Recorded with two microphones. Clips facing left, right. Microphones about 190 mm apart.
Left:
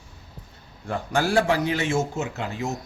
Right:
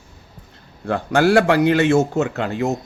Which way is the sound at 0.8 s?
75° right (ahead or behind).